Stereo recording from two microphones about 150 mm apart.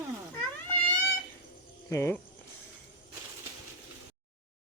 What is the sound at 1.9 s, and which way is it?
Speech, 20° left (ahead or behind).